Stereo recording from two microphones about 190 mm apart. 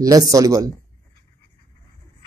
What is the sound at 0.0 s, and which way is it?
Speech, 20° right (ahead or behind).